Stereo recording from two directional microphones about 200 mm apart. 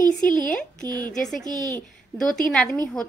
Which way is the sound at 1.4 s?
20° right (ahead or behind).